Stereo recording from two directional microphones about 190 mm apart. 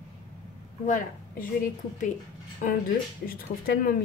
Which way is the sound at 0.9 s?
45° left (ahead or behind).